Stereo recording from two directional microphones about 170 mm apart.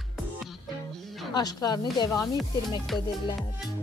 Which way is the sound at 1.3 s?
25° left (ahead or behind).